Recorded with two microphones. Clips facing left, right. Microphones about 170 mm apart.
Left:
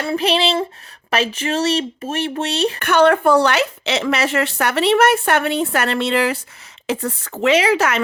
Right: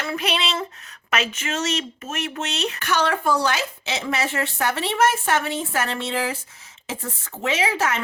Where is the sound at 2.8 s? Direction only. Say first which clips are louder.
Left 9 dB; 55° left (ahead or behind).